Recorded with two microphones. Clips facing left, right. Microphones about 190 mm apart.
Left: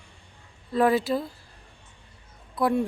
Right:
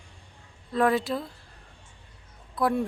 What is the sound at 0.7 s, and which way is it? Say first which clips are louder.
Speech: left 2 dB; centre (ahead or behind).